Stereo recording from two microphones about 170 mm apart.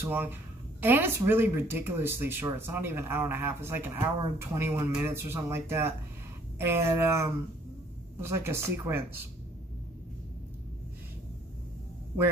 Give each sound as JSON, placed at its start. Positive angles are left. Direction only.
{"t": 0.0, "sound": "speech", "side_deg": -10}